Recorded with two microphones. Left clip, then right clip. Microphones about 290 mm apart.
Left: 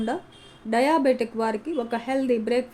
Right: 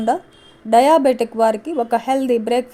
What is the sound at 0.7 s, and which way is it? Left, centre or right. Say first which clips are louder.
A woman's voice: right 9 dB; right.